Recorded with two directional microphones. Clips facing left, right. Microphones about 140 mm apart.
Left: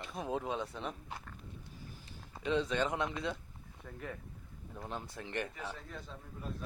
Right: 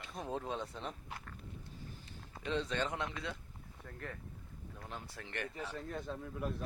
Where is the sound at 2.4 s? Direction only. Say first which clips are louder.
Left 4 dB; 10° left (ahead or behind).